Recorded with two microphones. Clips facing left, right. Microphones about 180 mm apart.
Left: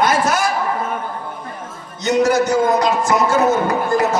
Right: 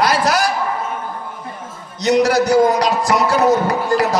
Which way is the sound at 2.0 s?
35° right (ahead or behind).